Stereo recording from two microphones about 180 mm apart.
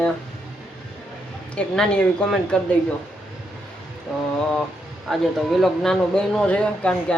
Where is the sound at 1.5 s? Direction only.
5° left (ahead or behind).